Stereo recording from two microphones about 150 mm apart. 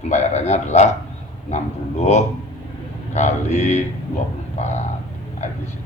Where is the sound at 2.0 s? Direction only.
50° left (ahead or behind).